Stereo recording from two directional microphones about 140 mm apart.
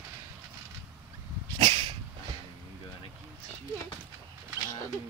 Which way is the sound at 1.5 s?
40° right (ahead or behind).